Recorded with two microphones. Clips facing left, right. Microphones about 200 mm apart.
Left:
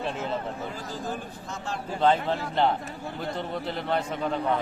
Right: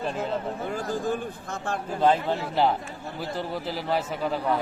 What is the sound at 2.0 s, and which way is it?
A man's voice, 5° right (ahead or behind).